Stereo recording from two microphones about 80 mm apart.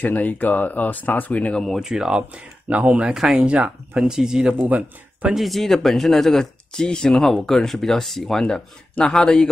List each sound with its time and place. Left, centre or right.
0.0 s speech: centre
1.8 s speech: centre
5.3 s speech: centre